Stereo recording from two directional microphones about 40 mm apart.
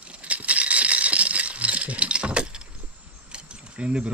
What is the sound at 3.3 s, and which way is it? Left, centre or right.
Keys jangling, right.